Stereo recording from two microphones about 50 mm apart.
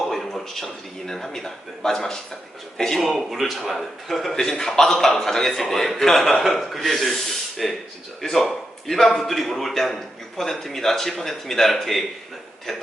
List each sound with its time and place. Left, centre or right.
0.0 s a man's voice: centre